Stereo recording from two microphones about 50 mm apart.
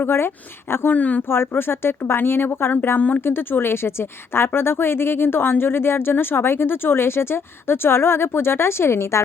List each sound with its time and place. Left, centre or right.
0.0 s speech: left
0.9 s speech: left
1.3 s speech: left